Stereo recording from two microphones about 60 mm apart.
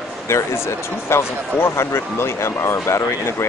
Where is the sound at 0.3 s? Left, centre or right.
Left.